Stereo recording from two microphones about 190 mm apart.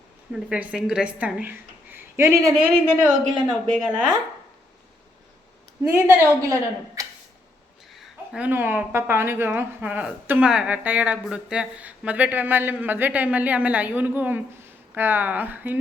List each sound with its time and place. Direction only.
0.3 s speech: 5° right (ahead or behind)
5.9 s speech: 15° right (ahead or behind)
7.9 s speech: 5° right (ahead or behind)